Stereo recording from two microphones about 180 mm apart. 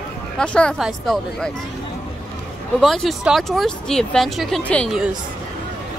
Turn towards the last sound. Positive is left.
turn(degrees=0)  # may be behind; listen again after turning